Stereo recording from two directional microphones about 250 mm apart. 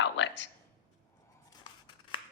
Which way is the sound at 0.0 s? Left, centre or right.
Left.